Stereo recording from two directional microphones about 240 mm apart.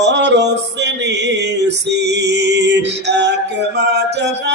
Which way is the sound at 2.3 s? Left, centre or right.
Right.